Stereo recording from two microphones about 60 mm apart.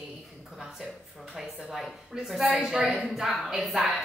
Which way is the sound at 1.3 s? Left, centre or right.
Centre.